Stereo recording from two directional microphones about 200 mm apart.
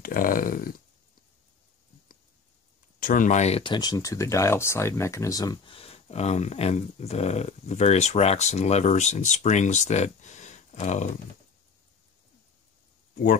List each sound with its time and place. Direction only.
0.0 s speech: 45° left (ahead or behind)
3.0 s speech: 45° left (ahead or behind)
13.1 s speech: 40° left (ahead or behind)